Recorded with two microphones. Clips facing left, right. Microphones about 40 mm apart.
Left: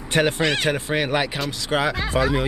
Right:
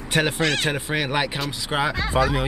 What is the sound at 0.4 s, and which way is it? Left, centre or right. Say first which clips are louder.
Speech: left 1 dB; centre.